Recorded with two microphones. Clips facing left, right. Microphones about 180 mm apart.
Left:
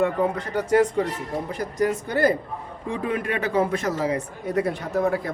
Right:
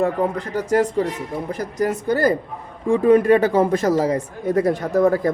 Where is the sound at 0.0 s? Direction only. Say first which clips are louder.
Right 2 dB; 35° right (ahead or behind).